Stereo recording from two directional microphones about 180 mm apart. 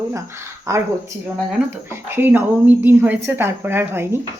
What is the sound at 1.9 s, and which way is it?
A woman's voice, 10° right (ahead or behind).